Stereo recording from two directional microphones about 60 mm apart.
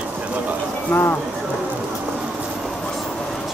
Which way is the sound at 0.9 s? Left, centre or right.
Left.